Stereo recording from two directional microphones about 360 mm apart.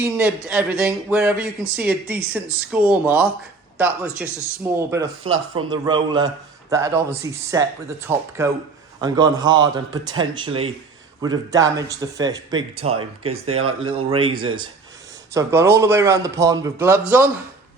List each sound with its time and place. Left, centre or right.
0.0 s a man's voice: centre